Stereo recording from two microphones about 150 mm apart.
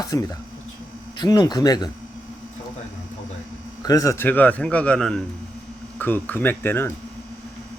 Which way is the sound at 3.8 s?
25° left (ahead or behind).